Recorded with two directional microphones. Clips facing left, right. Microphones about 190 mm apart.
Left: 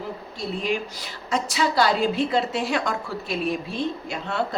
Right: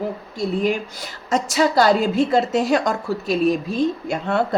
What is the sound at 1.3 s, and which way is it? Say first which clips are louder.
Speech: right 5 dB; 45° right (ahead or behind).